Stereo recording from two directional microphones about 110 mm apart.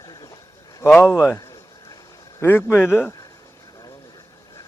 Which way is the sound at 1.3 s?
25° left (ahead or behind).